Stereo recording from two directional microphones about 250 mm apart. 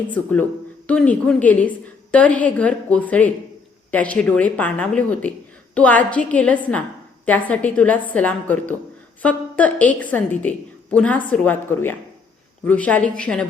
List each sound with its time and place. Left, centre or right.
0.1 s a woman's voice: centre